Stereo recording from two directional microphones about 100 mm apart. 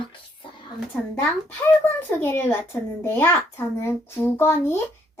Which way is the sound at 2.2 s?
20° left (ahead or behind).